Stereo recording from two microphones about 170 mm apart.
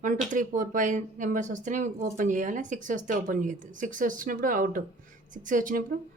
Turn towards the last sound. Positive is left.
turn(degrees=-55)  # may be behind; listen again after turning